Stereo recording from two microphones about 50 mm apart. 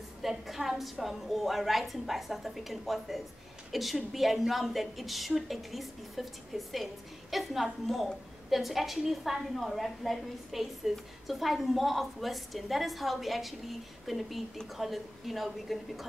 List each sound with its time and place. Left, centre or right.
0.2 s a woman's voice: centre